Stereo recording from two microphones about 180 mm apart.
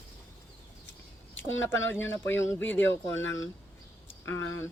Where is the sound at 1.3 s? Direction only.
90° left.